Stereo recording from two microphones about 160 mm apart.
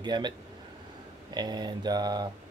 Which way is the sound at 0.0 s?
30° right (ahead or behind).